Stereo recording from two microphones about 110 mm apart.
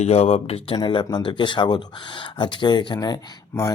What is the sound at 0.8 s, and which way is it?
Speech, 40° left (ahead or behind).